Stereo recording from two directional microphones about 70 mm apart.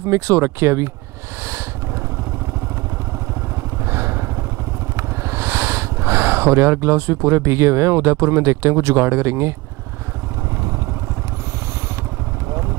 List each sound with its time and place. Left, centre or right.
0.1 s speech: right
3.8 s vehicle: right
4.9 s speech: right